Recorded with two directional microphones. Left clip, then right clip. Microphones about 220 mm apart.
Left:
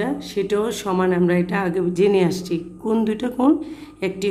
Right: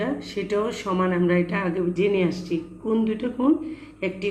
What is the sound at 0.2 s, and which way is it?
Speech, 35° left (ahead or behind).